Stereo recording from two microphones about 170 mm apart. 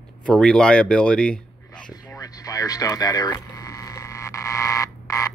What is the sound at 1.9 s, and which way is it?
Radio, 20° left (ahead or behind).